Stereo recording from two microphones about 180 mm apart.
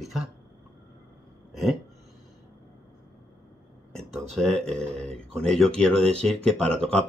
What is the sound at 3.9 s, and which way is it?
Speech, 5° left (ahead or behind).